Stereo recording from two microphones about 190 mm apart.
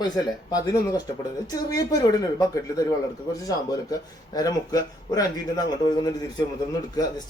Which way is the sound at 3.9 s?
20° left (ahead or behind).